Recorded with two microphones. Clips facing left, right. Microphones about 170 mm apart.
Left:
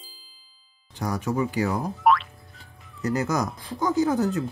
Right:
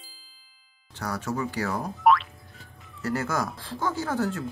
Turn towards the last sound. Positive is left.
turn(degrees=15)  # may be behind; listen again after turning